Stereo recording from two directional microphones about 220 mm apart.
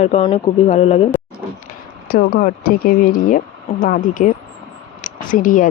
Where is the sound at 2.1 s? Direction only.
40° left (ahead or behind).